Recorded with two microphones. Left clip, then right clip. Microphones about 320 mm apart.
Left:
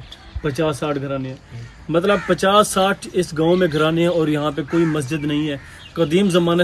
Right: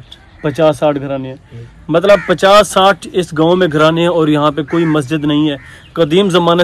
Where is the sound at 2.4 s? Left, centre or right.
Centre.